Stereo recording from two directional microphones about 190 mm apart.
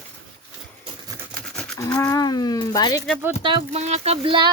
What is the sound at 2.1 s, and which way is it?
Speech, 20° left (ahead or behind).